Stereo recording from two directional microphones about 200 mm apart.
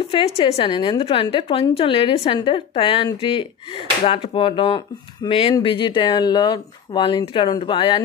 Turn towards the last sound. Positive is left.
turn(degrees=25)  # may be behind; listen again after turning